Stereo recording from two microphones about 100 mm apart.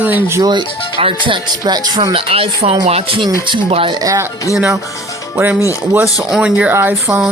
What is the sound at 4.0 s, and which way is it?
Speech, 35° right (ahead or behind).